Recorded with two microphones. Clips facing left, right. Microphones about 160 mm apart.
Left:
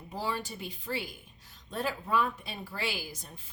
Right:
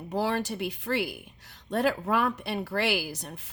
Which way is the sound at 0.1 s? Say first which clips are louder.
Right 7 dB; 75° right (ahead or behind).